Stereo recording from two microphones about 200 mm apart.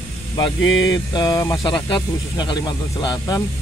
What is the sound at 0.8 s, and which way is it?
Speech, 20° left (ahead or behind).